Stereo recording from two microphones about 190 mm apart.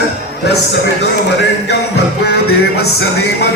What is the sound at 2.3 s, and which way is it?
Music, 55° left (ahead or behind).